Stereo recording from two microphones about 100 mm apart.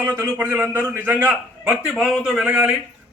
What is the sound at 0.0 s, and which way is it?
A man's voice, 20° right (ahead or behind).